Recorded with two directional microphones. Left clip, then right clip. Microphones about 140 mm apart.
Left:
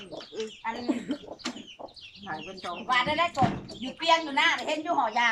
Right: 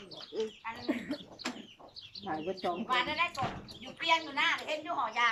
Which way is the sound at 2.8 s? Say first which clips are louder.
Left 7 dB; 70° left (ahead or behind).